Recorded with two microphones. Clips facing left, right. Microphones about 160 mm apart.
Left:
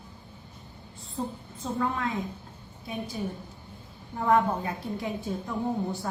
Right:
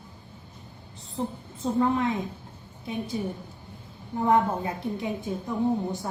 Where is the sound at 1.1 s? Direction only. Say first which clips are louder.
Right 2 dB; 20° right (ahead or behind).